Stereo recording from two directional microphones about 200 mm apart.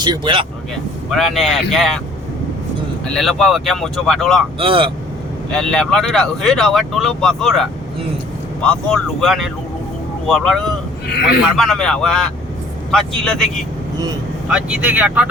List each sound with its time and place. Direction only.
0.0 s speech: 25° right (ahead or behind)
1.1 s speech: centre (ahead or behind)
3.1 s speech: centre (ahead or behind)
4.6 s speech: 25° right (ahead or behind)
5.5 s speech: 5° left (ahead or behind)